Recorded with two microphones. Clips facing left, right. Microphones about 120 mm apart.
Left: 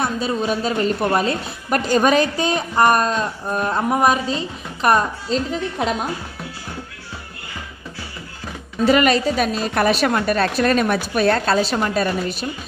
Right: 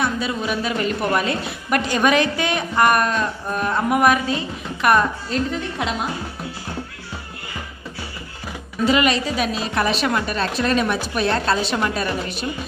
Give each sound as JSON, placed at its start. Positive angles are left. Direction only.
{"t": 0.0, "sound": "a woman's voice", "side_deg": 35}
{"t": 8.9, "sound": "a woman's voice", "side_deg": 45}